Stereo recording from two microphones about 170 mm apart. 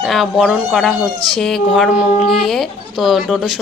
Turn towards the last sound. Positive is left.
turn(degrees=-5)  # may be behind; listen again after turning